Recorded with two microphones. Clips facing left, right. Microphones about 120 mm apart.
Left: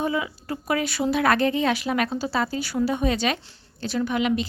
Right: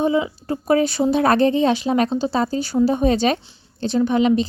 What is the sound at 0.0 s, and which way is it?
A woman's voice, 25° right (ahead or behind).